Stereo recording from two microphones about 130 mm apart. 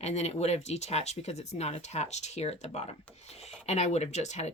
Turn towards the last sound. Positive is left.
turn(degrees=60)  # may be behind; listen again after turning